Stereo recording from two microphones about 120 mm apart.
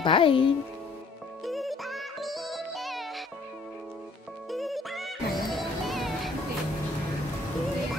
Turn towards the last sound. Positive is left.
turn(degrees=0)  # may be behind; listen again after turning